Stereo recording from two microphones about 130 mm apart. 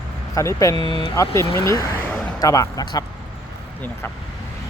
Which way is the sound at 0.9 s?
40° left (ahead or behind).